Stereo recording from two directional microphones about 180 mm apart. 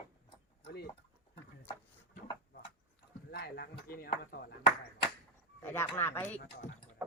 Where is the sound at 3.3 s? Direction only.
65° left (ahead or behind).